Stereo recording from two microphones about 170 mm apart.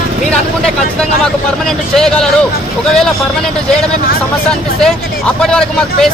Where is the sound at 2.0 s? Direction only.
5° left (ahead or behind).